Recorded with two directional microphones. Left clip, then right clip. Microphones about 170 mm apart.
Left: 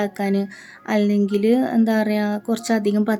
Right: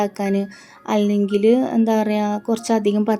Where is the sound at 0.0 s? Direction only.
Centre (ahead or behind).